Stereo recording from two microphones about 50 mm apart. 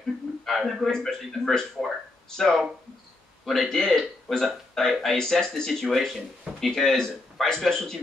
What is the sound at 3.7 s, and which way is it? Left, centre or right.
Speech, centre.